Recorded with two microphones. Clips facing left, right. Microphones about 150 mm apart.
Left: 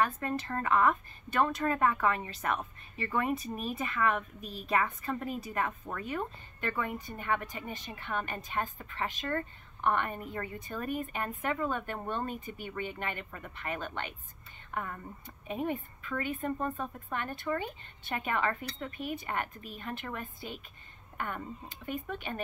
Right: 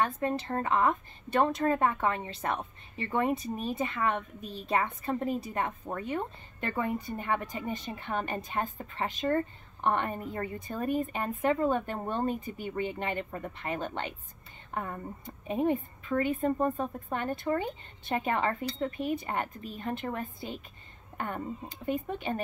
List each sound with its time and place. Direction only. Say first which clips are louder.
0.0 s a woman's voice: right 2 dB; 25° right (ahead or behind)
21.9 s a woman's voice: right 4 dB; 30° right (ahead or behind)